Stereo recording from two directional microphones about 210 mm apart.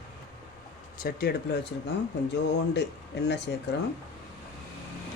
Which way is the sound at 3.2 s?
55° left (ahead or behind).